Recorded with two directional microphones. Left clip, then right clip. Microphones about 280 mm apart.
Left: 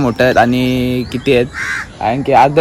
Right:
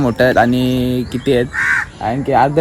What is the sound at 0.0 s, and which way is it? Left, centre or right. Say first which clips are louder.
Speech: left 1 dB; centre.